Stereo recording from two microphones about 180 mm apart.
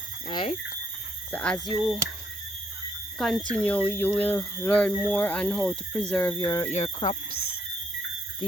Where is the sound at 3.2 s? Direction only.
Centre (ahead or behind); by 7.2 s 25° left (ahead or behind).